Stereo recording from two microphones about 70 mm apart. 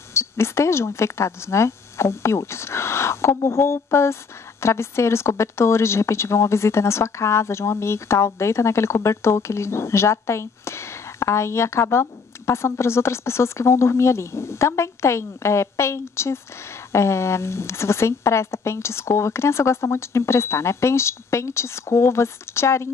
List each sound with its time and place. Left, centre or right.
0.1 s speech: left